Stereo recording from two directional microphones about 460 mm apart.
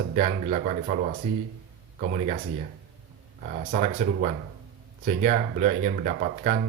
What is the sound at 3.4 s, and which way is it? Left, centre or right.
Speech, centre.